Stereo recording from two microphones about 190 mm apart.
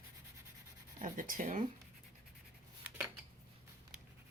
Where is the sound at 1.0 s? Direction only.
45° right (ahead or behind).